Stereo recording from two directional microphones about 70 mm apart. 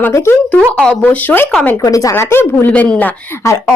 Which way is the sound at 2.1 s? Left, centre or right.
Left.